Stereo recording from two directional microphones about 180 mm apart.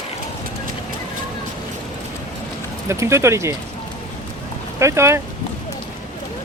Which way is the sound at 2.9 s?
15° right (ahead or behind).